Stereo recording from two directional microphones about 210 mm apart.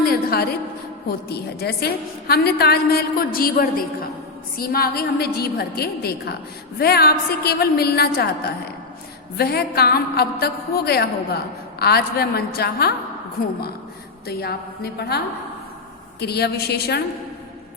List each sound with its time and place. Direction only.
0.0 s a sound: 45° left (ahead or behind)
1.0 s a woman's voice: 50° left (ahead or behind)
9.4 s a woman's voice: 50° left (ahead or behind)
14.3 s a woman's voice: 50° left (ahead or behind)
16.2 s a woman's voice: 50° left (ahead or behind)